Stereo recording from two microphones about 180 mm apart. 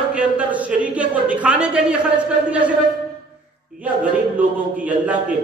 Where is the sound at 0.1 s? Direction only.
5° right (ahead or behind).